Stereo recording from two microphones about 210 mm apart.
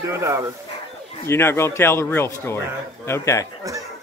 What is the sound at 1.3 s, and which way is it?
Speech, 10° left (ahead or behind).